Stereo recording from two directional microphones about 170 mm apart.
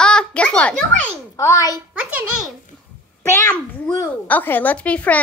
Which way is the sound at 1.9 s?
10° right (ahead or behind).